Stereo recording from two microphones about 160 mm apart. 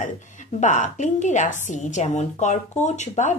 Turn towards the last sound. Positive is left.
turn(degrees=45)  # may be behind; listen again after turning